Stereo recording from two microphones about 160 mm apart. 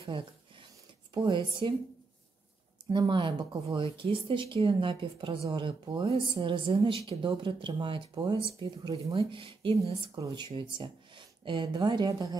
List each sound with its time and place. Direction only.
0.0 s a sound: 30° right (ahead or behind)
1.1 s speech: 30° right (ahead or behind)
2.9 s speech: 30° right (ahead or behind)